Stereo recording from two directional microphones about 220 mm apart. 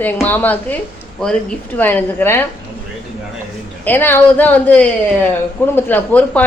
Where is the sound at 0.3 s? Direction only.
10° left (ahead or behind).